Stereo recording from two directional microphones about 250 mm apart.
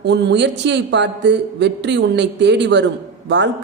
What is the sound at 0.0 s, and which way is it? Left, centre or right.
Speech, right.